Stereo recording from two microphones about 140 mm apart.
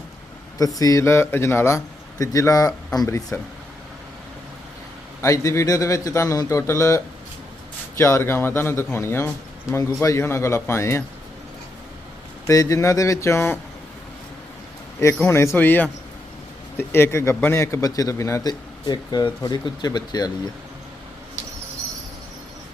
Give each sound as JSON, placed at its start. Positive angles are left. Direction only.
{"t": 0.6, "sound": "speech", "side_deg": 25}
{"t": 5.2, "sound": "speech", "side_deg": 25}
{"t": 12.5, "sound": "speech", "side_deg": 20}
{"t": 15.0, "sound": "speech", "side_deg": 20}